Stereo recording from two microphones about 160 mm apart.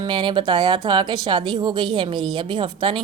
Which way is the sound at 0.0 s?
30° right (ahead or behind).